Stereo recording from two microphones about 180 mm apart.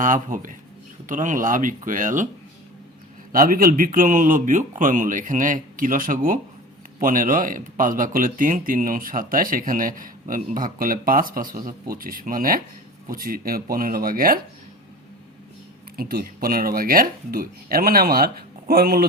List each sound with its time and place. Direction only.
0.0 s speech: 50° right (ahead or behind)
3.3 s speech: 50° right (ahead or behind)
16.0 s speech: 55° right (ahead or behind)